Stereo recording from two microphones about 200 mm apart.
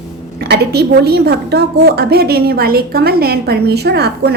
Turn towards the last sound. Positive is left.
turn(degrees=-55)  # may be behind; listen again after turning